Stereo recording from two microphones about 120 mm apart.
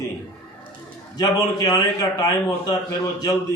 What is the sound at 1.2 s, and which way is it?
A man's voice, 35° left (ahead or behind).